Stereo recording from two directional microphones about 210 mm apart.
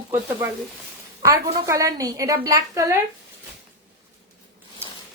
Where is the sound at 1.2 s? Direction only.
15° right (ahead or behind).